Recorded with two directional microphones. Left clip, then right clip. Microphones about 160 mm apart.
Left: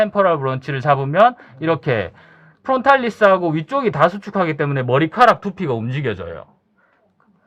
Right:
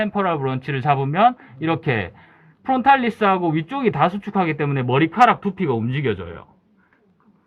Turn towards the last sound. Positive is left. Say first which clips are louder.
# even
turn(degrees=45)  # may be behind; listen again after turning